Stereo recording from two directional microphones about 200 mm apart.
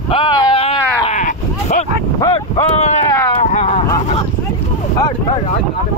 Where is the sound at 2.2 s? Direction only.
30° left (ahead or behind).